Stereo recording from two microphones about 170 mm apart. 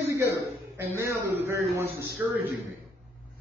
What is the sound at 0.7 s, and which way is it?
A man's voice, 15° right (ahead or behind).